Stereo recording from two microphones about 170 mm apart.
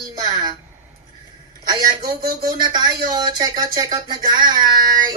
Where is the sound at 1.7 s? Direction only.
25° right (ahead or behind).